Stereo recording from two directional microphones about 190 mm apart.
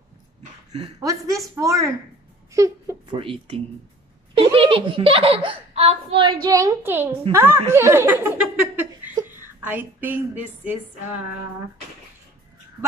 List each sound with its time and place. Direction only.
0.7 s a child's voice: 25° right (ahead or behind)
3.2 s a child's voice: 30° right (ahead or behind); by 11.2 s 10° right (ahead or behind)